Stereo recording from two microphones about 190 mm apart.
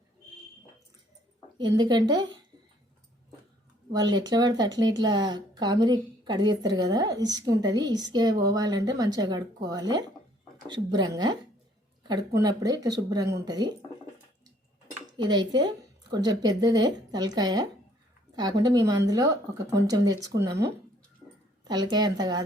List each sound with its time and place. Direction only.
1.5 s a woman's voice: 20° right (ahead or behind)
3.9 s a woman's voice: 20° right (ahead or behind)
15.2 s a woman's voice: 25° right (ahead or behind)